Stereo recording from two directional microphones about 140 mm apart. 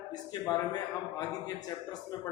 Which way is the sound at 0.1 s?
30° left (ahead or behind).